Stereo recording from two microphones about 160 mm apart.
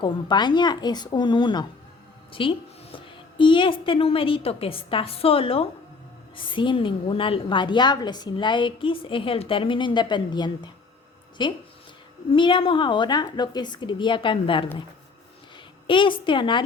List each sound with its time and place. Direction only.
0.0 s a woman's voice: 25° left (ahead or behind)
15.9 s a woman's voice: 30° left (ahead or behind)